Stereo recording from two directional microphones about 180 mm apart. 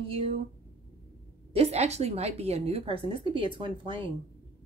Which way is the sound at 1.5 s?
35° right (ahead or behind).